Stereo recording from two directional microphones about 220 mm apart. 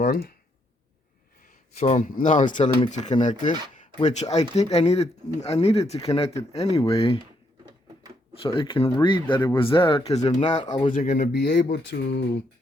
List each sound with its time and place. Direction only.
1.8 s speech: 35° left (ahead or behind)
8.3 s speech: 25° left (ahead or behind); by 12.4 s 55° left (ahead or behind)